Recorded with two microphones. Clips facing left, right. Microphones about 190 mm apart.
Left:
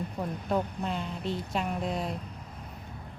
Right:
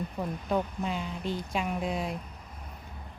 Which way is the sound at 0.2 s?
Centre (ahead or behind).